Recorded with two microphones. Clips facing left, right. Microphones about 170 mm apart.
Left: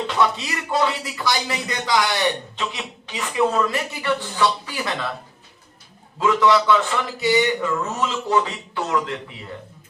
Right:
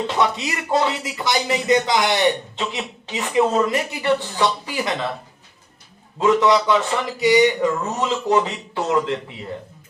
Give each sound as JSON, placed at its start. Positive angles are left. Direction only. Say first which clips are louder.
{"t": 0.1, "sound": "speech", "louder": "even", "side_deg": -20}
{"t": 6.1, "sound": "speech", "louder": "right 1 dB", "side_deg": -20}